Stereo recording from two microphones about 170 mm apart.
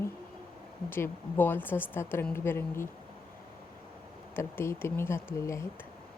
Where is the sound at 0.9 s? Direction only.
10° left (ahead or behind).